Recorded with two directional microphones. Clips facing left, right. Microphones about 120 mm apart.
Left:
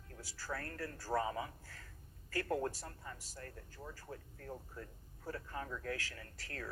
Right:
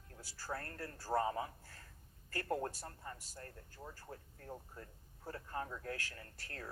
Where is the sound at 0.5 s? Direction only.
30° right (ahead or behind).